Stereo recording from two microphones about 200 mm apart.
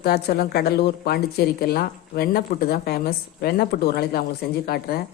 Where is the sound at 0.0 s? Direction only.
50° left (ahead or behind).